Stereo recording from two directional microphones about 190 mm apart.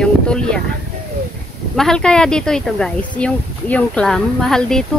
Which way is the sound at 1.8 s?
5° left (ahead or behind).